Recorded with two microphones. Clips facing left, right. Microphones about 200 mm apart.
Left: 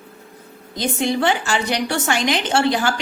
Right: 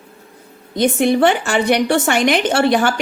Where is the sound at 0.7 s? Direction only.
60° right (ahead or behind).